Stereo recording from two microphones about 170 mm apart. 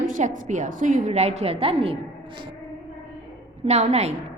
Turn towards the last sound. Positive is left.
turn(degrees=-40)  # may be behind; listen again after turning